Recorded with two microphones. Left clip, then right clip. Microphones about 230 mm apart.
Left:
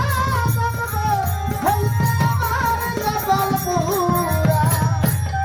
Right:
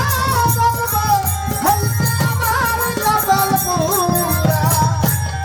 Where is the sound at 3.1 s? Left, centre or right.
Right.